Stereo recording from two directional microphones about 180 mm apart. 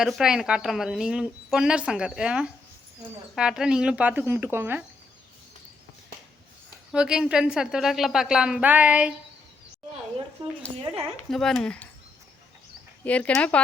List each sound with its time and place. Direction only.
0.0 s speech: 5° right (ahead or behind)
6.9 s speech: 5° right (ahead or behind)
11.3 s speech: centre (ahead or behind)
13.1 s speech: 5° left (ahead or behind)